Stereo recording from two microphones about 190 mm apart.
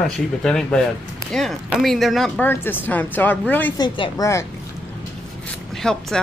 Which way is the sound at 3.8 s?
20° left (ahead or behind).